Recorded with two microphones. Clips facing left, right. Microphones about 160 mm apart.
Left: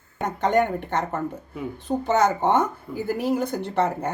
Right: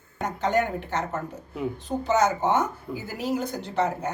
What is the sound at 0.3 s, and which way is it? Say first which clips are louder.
A woman's voice: left 4 dB; 60° left (ahead or behind).